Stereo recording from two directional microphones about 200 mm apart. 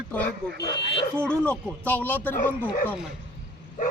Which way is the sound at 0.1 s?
10° left (ahead or behind).